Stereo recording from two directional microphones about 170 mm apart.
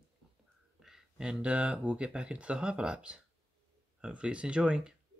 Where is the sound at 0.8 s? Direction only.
5° right (ahead or behind).